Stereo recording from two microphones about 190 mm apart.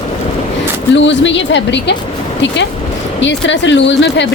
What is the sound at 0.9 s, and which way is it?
Speech, 70° left (ahead or behind).